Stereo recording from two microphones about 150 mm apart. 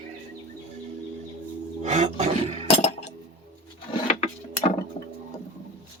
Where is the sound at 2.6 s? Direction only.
40° left (ahead or behind).